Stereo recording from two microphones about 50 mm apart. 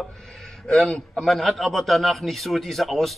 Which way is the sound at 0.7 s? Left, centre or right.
Centre.